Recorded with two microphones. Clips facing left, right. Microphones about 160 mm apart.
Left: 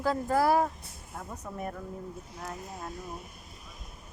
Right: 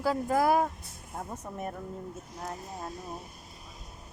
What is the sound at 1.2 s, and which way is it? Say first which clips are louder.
Speech: right 3 dB; 35° right (ahead or behind).